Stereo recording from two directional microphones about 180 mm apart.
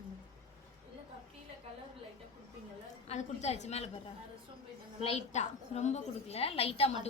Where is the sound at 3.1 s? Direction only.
40° left (ahead or behind).